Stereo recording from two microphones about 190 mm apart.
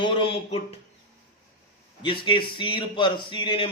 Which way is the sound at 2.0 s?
25° left (ahead or behind).